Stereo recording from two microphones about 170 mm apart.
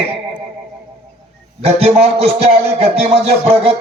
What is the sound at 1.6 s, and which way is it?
A man's voice, 35° right (ahead or behind).